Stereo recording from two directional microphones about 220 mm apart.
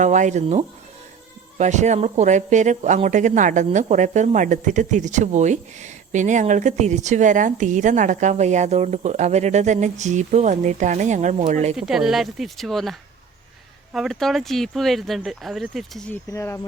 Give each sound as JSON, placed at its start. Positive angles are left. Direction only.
{"t": 0.0, "sound": "speech", "side_deg": -35}
{"t": 11.8, "sound": "speech", "side_deg": 0}